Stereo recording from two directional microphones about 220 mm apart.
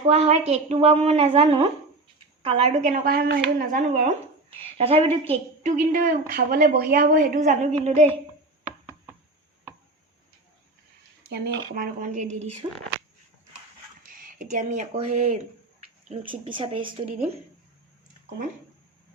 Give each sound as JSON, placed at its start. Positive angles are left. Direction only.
{"t": 0.0, "sound": "a woman's voice", "side_deg": -30}
{"t": 11.3, "sound": "a woman's voice", "side_deg": -45}
{"t": 14.0, "sound": "a woman's voice", "side_deg": -40}